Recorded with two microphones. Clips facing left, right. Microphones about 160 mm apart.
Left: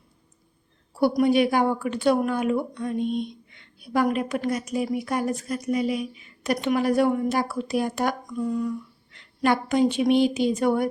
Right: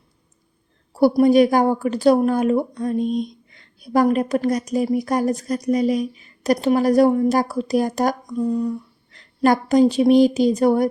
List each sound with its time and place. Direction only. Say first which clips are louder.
0.9 s speech: right 6 dB; 40° right (ahead or behind)